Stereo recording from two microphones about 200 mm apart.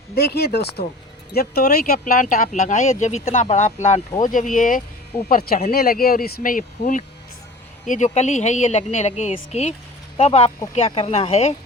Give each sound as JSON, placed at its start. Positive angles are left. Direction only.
{"t": 0.1, "sound": "a woman's voice", "side_deg": 50}